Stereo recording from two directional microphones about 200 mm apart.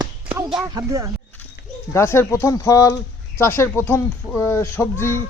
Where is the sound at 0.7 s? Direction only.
15° right (ahead or behind).